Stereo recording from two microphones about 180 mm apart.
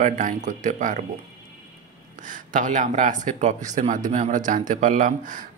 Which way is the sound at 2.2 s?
45° right (ahead or behind).